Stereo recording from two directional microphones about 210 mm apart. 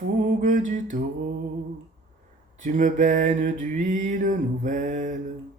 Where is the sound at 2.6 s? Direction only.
35° right (ahead or behind).